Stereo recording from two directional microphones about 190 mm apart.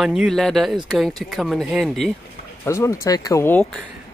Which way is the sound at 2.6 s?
15° left (ahead or behind).